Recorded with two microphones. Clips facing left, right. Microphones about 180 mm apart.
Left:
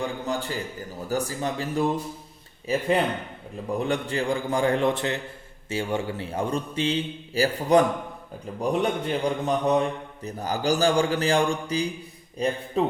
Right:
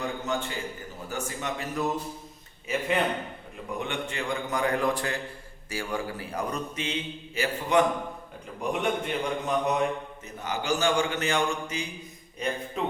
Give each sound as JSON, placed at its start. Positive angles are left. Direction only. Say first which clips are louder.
{"t": 0.3, "sound": "a man's voice", "louder": "left 2 dB", "side_deg": 35}